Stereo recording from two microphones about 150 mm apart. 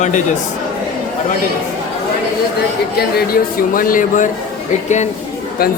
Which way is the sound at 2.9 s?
75° left (ahead or behind).